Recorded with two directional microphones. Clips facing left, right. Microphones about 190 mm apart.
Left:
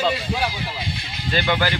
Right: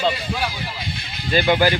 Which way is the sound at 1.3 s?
15° right (ahead or behind).